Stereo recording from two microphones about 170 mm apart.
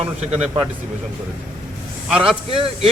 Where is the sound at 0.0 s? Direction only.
40° right (ahead or behind).